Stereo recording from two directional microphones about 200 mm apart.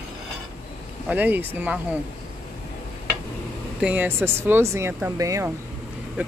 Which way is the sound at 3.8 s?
10° right (ahead or behind).